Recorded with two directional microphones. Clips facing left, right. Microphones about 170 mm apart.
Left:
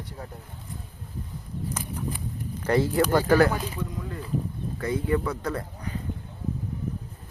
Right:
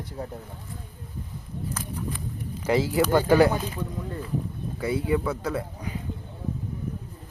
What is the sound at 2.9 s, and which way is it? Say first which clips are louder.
Speech: right 2 dB; 10° right (ahead or behind).